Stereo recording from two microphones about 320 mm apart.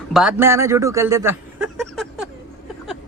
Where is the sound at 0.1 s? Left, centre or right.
Centre.